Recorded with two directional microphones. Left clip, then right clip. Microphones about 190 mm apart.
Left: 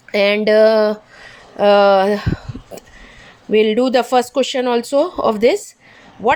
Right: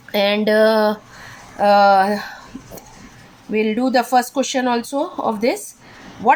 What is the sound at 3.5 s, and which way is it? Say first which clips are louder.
A woman's voice: left 4 dB; 45° left (ahead or behind).